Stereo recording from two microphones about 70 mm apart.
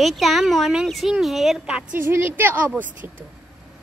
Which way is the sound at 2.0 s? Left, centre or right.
Right.